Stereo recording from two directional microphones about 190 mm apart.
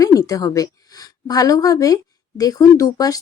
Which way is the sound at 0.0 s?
20° left (ahead or behind).